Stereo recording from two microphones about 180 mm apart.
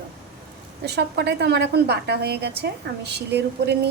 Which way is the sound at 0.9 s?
65° right (ahead or behind).